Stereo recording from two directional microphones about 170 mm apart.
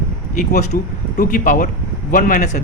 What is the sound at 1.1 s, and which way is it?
A man's voice, 50° left (ahead or behind).